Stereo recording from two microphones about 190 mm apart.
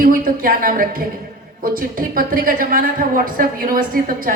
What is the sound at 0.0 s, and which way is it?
A woman's voice, 45° right (ahead or behind).